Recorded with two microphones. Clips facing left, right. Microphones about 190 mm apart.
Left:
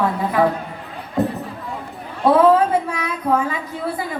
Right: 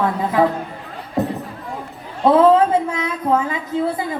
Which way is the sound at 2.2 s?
20° right (ahead or behind).